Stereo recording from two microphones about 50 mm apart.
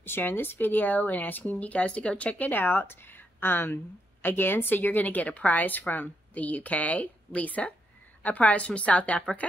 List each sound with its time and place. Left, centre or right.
0.0 s a woman's voice: left